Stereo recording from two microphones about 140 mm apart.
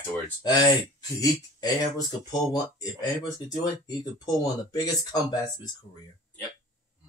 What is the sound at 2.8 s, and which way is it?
Speech, 30° left (ahead or behind).